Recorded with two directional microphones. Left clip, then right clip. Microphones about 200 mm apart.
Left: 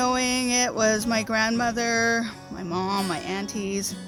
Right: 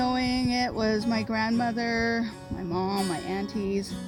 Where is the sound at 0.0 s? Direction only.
25° left (ahead or behind).